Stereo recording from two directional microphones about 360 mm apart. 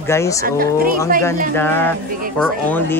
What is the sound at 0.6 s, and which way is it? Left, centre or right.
Speech, right.